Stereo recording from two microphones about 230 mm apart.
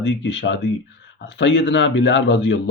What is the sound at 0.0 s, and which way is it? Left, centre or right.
A man's voice, left.